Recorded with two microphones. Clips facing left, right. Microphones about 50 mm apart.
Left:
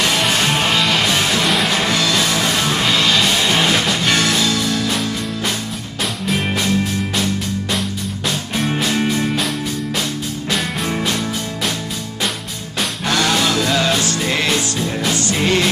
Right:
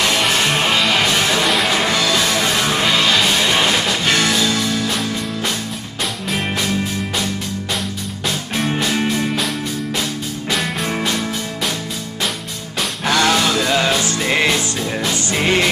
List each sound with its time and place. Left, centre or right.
0.1 s music: centre
8.5 s music: centre
10.9 s music: centre
13.0 s music: centre